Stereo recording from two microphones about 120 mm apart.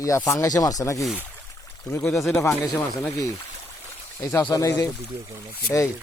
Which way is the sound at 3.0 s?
25° left (ahead or behind).